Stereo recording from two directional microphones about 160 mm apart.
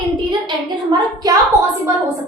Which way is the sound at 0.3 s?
25° right (ahead or behind).